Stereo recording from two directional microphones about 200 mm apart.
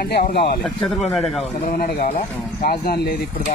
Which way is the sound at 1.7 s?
45° left (ahead or behind).